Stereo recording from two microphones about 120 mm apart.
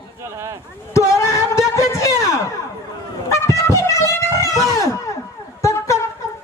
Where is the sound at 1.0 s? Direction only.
25° left (ahead or behind).